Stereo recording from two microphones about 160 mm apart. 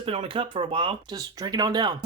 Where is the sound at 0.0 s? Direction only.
35° right (ahead or behind).